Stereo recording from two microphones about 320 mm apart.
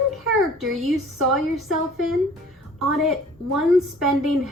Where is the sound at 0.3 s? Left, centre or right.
Centre.